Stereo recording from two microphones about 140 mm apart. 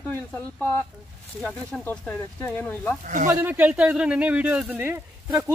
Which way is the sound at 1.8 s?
10° left (ahead or behind).